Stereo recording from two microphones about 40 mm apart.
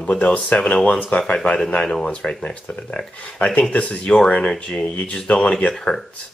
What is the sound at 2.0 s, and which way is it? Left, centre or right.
Speech, left.